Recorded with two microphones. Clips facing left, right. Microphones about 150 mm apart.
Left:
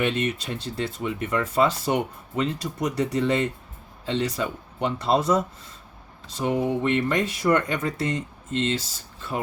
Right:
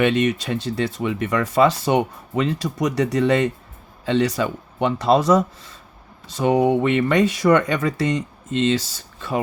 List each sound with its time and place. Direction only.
0.0 s speech: 90° right